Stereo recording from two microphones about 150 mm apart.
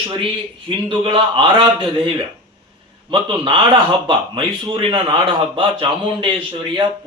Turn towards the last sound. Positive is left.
turn(degrees=-35)  # may be behind; listen again after turning